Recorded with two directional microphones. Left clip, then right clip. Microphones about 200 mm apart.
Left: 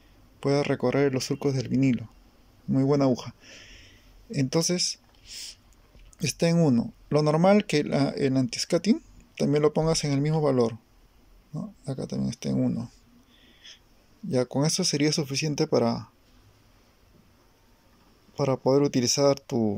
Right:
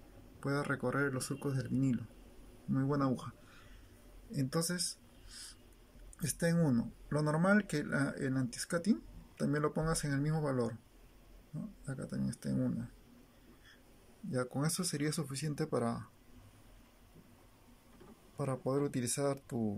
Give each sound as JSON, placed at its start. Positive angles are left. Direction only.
{"t": 0.4, "sound": "speech", "side_deg": 10}
{"t": 6.2, "sound": "speech", "side_deg": 15}
{"t": 11.8, "sound": "speech", "side_deg": 15}
{"t": 14.3, "sound": "speech", "side_deg": 15}
{"t": 18.3, "sound": "speech", "side_deg": 15}